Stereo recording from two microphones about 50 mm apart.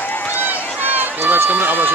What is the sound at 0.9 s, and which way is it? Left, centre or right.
Run, right.